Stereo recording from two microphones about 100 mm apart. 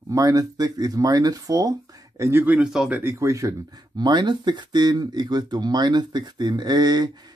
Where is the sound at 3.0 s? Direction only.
30° right (ahead or behind).